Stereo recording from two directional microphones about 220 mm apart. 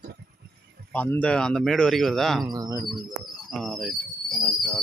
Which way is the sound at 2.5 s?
15° right (ahead or behind).